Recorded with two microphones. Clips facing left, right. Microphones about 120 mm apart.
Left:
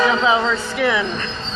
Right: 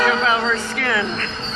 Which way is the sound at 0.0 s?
15° left (ahead or behind).